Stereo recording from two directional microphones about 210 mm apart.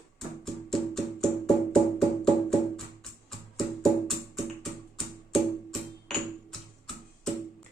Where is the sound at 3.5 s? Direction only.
Centre (ahead or behind).